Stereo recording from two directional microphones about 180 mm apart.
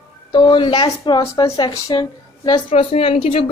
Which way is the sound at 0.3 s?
25° left (ahead or behind).